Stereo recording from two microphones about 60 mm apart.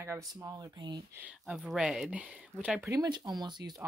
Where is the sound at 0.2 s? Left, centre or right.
Right.